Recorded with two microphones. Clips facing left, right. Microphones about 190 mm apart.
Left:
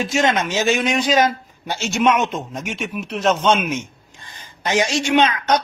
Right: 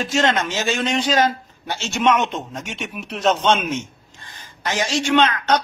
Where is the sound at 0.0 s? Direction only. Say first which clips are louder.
Left 1 dB; 10° left (ahead or behind).